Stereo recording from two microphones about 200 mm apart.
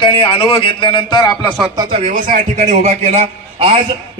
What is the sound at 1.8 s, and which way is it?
A man's voice, 30° right (ahead or behind).